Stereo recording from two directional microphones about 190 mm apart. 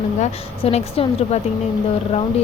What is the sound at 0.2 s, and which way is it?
Speech, 30° left (ahead or behind).